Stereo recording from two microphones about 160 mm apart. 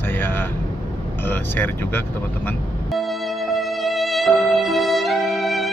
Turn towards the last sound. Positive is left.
turn(degrees=0)  # may be behind; listen again after turning